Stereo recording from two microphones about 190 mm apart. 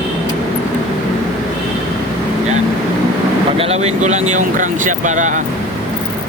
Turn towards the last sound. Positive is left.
turn(degrees=-40)  # may be behind; listen again after turning